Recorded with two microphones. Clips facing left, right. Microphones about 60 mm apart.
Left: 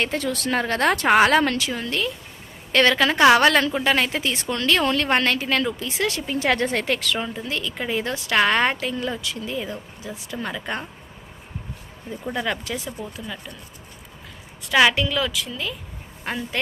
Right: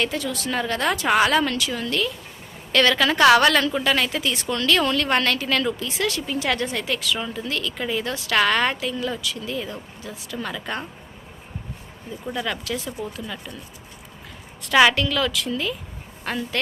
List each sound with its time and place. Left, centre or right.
0.0 s a woman's voice: left
7.2 s a woman's voice: left
12.2 s a woman's voice: left
13.1 s speech: centre
14.7 s speech: centre
14.9 s speech: centre
16.2 s speech: centre